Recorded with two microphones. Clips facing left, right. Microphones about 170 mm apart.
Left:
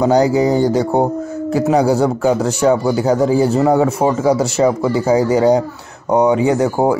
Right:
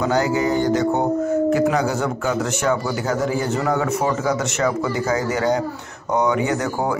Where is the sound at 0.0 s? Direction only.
35° left (ahead or behind).